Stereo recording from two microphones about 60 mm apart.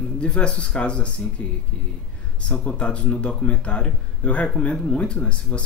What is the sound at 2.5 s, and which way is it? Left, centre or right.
Speech, centre.